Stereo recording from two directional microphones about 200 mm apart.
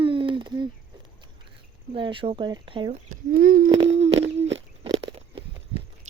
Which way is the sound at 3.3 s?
45° right (ahead or behind).